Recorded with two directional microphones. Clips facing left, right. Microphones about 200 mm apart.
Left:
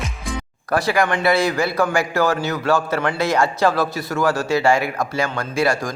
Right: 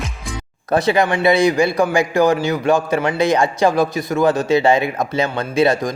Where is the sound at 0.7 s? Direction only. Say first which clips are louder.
Right 3 dB; 20° right (ahead or behind).